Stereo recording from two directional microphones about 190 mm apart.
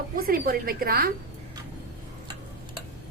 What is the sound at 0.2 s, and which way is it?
Speech, 50° right (ahead or behind).